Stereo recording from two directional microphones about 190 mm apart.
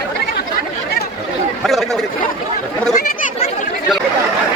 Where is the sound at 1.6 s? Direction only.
Centre (ahead or behind).